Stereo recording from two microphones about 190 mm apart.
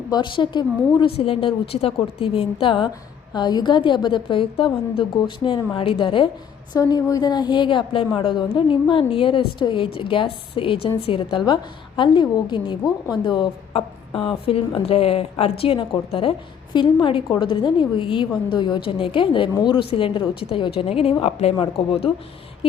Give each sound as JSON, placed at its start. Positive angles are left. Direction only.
{"t": 0.1, "sound": "a woman's voice", "side_deg": 25}